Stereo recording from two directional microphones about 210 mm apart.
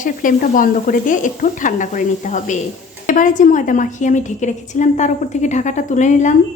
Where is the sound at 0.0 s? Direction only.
40° left (ahead or behind).